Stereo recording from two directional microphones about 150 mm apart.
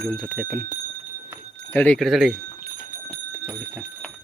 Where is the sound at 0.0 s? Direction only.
5° left (ahead or behind).